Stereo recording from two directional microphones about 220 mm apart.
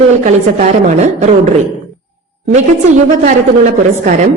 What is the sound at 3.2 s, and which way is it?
Speech, 35° right (ahead or behind).